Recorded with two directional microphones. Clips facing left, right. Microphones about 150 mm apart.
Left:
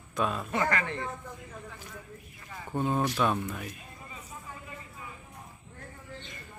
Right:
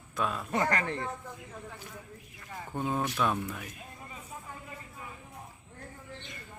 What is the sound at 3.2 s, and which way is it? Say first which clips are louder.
Speech: left 2 dB; 5° left (ahead or behind).